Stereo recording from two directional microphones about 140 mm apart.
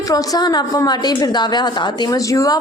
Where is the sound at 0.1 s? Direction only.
25° left (ahead or behind).